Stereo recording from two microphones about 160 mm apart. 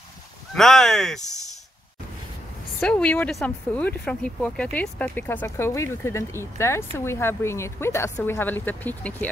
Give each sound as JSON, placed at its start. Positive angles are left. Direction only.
{"t": 0.6, "sound": "speech", "side_deg": 0}
{"t": 2.8, "sound": "speech", "side_deg": 5}